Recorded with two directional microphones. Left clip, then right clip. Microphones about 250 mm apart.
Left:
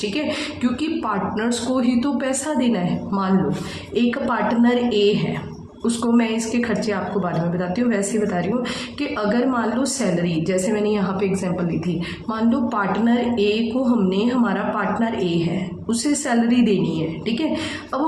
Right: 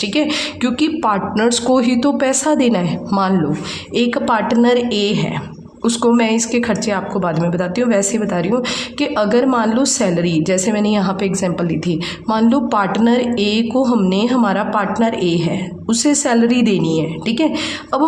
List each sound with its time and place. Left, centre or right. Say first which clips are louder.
0.1 s a woman's voice: right 6 dB; right